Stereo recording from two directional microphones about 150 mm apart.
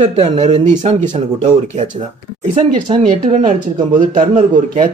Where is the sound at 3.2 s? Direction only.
55° right (ahead or behind).